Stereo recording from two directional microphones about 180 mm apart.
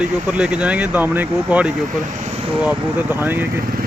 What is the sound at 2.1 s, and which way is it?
Vehicle, 45° right (ahead or behind).